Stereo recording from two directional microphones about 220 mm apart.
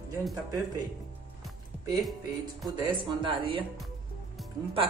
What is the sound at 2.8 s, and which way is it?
Speech, 25° right (ahead or behind).